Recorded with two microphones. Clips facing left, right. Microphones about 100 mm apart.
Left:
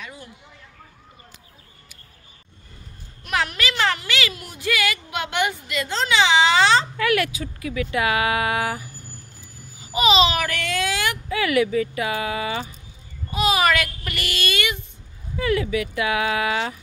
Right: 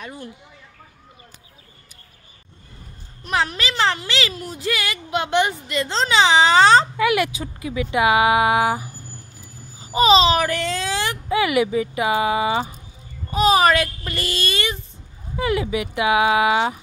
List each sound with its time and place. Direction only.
0.0 s a sound: 45° right (ahead or behind)
3.3 s speech: 30° right (ahead or behind)
7.0 s speech: 20° right (ahead or behind)
9.8 s a child's voice: 35° right (ahead or behind)
11.3 s speech: 20° right (ahead or behind)
13.3 s speech: 35° right (ahead or behind)
15.3 s speech: 20° right (ahead or behind)